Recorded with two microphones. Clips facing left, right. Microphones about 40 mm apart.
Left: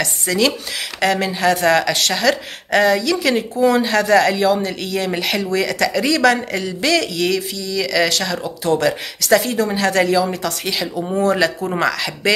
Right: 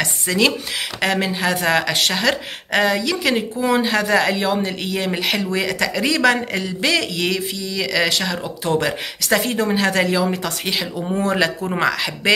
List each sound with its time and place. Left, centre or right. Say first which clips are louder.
0.0 s speech: even; centre
9.7 s speech: left 1 dB; centre